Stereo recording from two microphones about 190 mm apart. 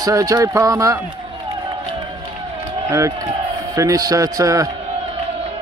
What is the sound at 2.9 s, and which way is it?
Speech, 15° right (ahead or behind).